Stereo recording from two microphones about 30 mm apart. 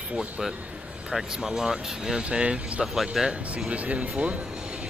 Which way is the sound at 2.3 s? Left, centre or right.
Right.